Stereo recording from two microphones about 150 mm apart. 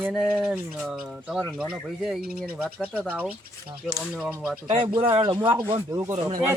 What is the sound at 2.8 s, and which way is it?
Speech, 10° right (ahead or behind).